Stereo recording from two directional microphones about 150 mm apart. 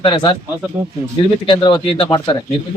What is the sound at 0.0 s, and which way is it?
Speech, 30° left (ahead or behind).